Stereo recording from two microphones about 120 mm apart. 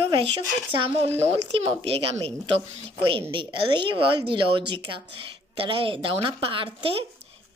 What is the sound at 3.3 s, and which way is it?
Speech, 45° right (ahead or behind).